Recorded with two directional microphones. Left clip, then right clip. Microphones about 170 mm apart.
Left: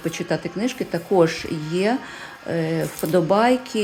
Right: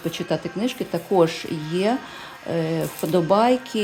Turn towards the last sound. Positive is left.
turn(degrees=-5)  # may be behind; listen again after turning